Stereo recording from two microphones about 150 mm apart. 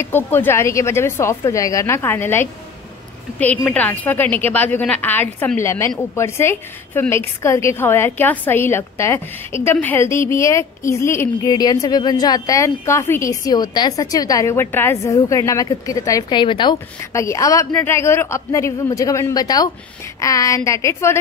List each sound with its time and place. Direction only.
0.0 s a woman's voice: 15° left (ahead or behind); by 16.7 s 30° left (ahead or behind)
17.1 s a man's voice: 20° left (ahead or behind)